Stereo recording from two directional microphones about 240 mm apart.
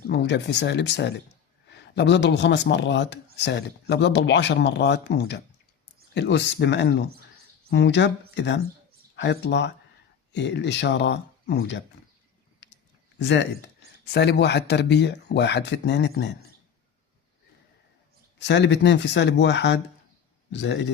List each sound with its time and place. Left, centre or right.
0.1 s speech: left
12.6 s clicking: left
13.1 s speech: left
18.3 s speech: left